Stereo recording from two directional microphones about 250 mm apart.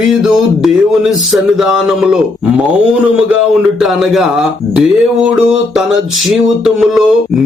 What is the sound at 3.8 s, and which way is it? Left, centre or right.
Speech, centre.